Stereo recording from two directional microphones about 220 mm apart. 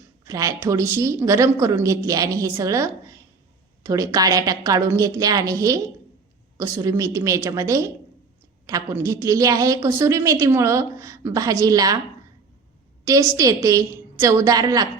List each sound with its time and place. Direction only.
0.3 s a woman's voice: 15° right (ahead or behind)
13.1 s a woman's voice: 15° right (ahead or behind)